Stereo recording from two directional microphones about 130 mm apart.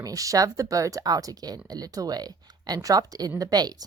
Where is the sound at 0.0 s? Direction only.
25° right (ahead or behind).